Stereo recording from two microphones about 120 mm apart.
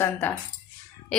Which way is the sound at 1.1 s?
10° left (ahead or behind).